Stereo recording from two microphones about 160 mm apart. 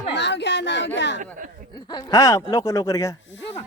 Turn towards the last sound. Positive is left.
turn(degrees=20)  # may be behind; listen again after turning